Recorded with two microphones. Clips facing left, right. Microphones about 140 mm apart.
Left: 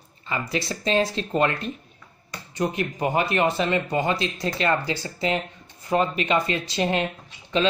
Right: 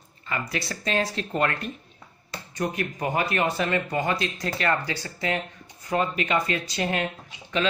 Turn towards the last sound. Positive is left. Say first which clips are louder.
# left 3 dB
turn(degrees=20)  # may be behind; listen again after turning